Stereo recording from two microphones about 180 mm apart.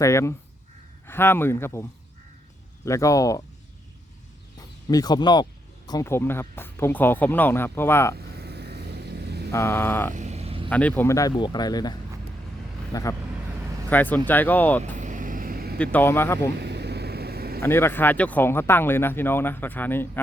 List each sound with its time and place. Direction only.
0.0 s speech: 15° left (ahead or behind)
4.5 s speech: 20° left (ahead or behind)
8.4 s vehicle: 65° right (ahead or behind)
9.5 s speech: 15° left (ahead or behind)
10.2 s vehicle: 40° right (ahead or behind)
10.7 s speech: 10° left (ahead or behind)
14.9 s vehicle: 45° right (ahead or behind)
15.8 s speech: 10° left (ahead or behind)
16.6 s vehicle: 65° right (ahead or behind)
17.6 s speech: 15° left (ahead or behind)